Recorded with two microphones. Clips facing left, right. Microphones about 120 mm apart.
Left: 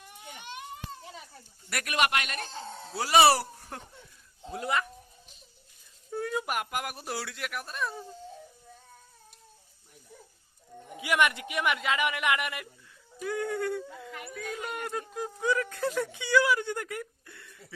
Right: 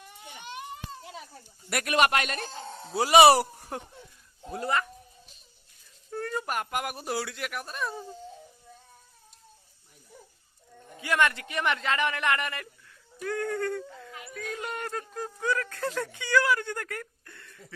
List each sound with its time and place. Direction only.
1.7 s speech: 30° right (ahead or behind)
2.8 s speech: 20° right (ahead or behind)
4.5 s speech: centre (ahead or behind)
6.1 s speech: 5° left (ahead or behind)
10.8 s speech: 15° left (ahead or behind)